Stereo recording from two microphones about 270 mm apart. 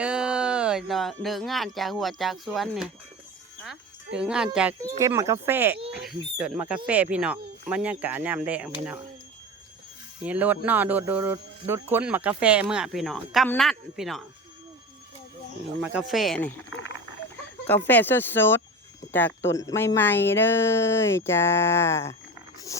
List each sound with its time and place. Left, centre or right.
0.0 s speech: centre
3.6 s music: centre
4.5 s speech: centre
10.2 s speech: centre
15.8 s speech: centre
17.7 s speech: centre